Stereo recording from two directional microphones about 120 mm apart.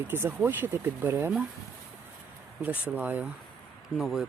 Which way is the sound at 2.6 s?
15° right (ahead or behind).